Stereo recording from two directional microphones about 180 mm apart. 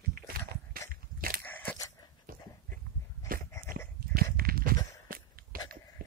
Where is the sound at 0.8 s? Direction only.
55° right (ahead or behind).